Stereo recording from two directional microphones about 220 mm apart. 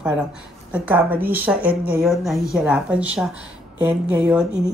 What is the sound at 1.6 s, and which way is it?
Speech, 40° right (ahead or behind).